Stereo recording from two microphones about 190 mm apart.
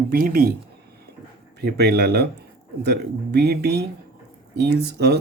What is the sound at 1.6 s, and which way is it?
Speech, 55° right (ahead or behind).